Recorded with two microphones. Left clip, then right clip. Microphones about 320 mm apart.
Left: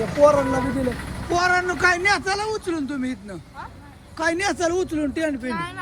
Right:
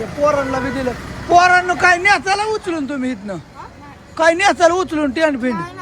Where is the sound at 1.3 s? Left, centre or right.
Centre.